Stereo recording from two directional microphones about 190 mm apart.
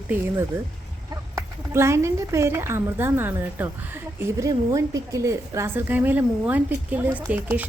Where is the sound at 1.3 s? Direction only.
15° right (ahead or behind).